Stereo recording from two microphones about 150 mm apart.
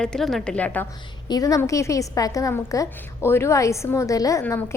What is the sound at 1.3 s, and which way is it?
A woman's voice, 25° left (ahead or behind).